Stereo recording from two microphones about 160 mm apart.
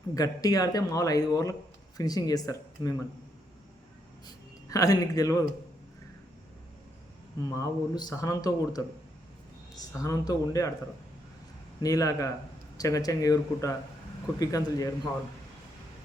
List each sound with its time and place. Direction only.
0.1 s speech: 20° left (ahead or behind)
4.3 s speech: 20° left (ahead or behind)
7.5 s speech: 25° left (ahead or behind)
9.9 s speech: 20° left (ahead or behind)
11.8 s speech: 20° left (ahead or behind)